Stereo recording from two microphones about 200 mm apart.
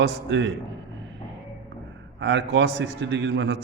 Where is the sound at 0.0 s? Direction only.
60° right (ahead or behind).